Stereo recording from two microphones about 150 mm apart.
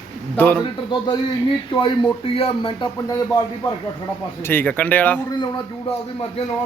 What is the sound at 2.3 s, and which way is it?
Speech, 35° left (ahead or behind).